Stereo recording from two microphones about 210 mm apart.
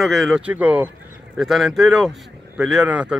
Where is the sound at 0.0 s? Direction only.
Centre (ahead or behind).